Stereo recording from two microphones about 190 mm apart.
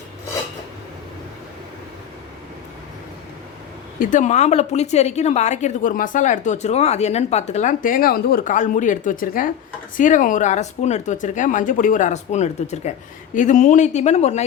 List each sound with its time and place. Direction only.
4.0 s a woman's voice: 40° left (ahead or behind)